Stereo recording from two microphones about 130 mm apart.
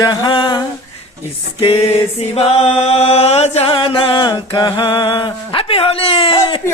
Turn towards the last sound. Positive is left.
turn(degrees=45)  # may be behind; listen again after turning